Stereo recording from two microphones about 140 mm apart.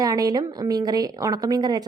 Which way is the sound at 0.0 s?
25° right (ahead or behind).